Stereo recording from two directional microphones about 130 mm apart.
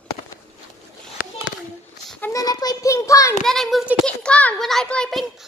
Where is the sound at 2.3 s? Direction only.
30° left (ahead or behind).